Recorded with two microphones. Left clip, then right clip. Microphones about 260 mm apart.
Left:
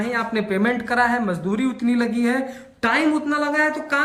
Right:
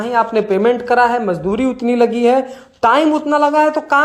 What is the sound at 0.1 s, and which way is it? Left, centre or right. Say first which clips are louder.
Speech: right 11 dB; centre.